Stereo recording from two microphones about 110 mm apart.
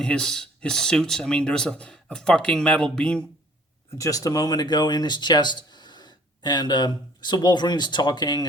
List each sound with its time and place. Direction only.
0.0 s speech: 5° left (ahead or behind)
3.9 s speech: 30° left (ahead or behind)